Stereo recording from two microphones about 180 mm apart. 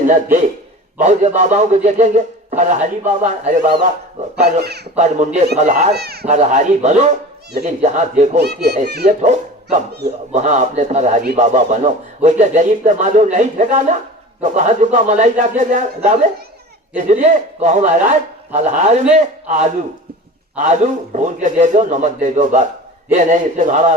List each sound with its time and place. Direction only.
0.1 s speech: 45° right (ahead or behind)
4.6 s speech: 65° right (ahead or behind)
4.9 s speech: 40° right (ahead or behind)
5.9 s speech: 65° right (ahead or behind)
6.2 s speech: 40° right (ahead or behind)
8.4 s speech: 65° right (ahead or behind)
9.0 s speech: 40° right (ahead or behind)